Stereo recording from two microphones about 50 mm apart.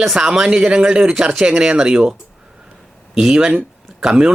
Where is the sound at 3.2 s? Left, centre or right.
Centre.